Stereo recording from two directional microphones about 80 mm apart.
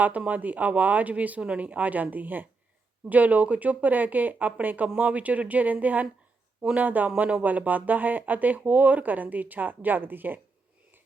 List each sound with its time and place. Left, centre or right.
0.0 s speech: centre